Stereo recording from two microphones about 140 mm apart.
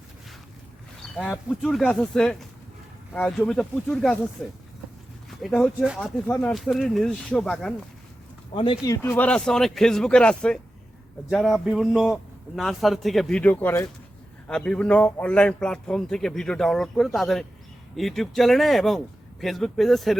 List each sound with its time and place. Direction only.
1.1 s a man's voice: 5° left (ahead or behind)
5.3 s a man's voice: centre (ahead or behind)
8.5 s speech: 40° left (ahead or behind)
8.8 s a man's voice: 20° left (ahead or behind); by 20.1 s centre (ahead or behind)